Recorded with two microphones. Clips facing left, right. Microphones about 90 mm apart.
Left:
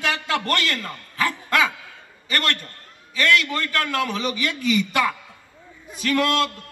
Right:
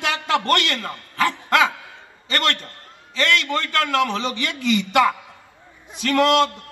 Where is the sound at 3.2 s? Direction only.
60° right (ahead or behind).